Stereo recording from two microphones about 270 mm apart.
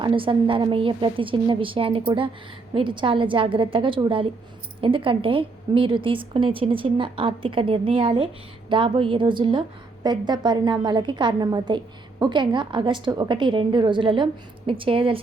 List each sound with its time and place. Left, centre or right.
0.0 s a woman's voice: centre